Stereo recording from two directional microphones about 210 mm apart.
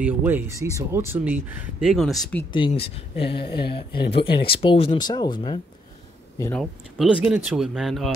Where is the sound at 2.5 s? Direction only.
25° left (ahead or behind).